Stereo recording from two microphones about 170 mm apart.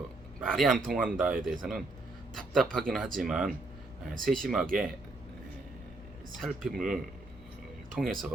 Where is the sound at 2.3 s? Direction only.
5° left (ahead or behind).